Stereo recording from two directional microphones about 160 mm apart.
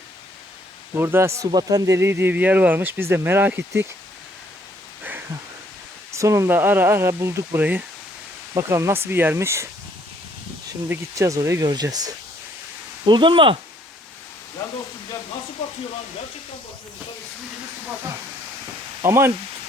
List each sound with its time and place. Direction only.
0.9 s speech: 15° right (ahead or behind)
6.1 s speech: 20° right (ahead or behind)
10.8 s speech: 20° right (ahead or behind)
19.0 s speech: 15° right (ahead or behind)